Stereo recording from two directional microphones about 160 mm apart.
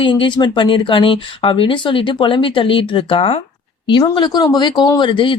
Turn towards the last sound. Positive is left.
turn(degrees=30)  # may be behind; listen again after turning